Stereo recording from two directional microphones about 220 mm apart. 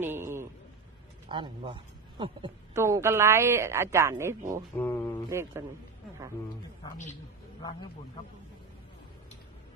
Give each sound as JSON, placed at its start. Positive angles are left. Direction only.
{"t": 0.0, "sound": "a sound", "side_deg": -10}
{"t": 1.3, "sound": "speech", "side_deg": -20}
{"t": 2.7, "sound": "speech", "side_deg": -10}
{"t": 4.7, "sound": "mantra", "side_deg": 10}
{"t": 5.3, "sound": "speech", "side_deg": -10}